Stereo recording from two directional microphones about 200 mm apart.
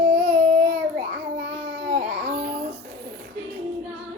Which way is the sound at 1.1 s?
55° right (ahead or behind).